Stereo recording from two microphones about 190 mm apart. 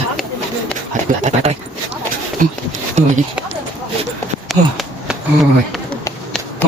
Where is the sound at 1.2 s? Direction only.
35° right (ahead or behind).